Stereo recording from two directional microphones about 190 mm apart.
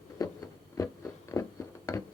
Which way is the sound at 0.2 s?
20° left (ahead or behind).